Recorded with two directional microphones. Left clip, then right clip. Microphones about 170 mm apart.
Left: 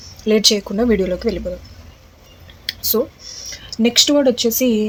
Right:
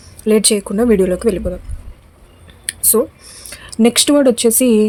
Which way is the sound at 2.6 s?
40° right (ahead or behind).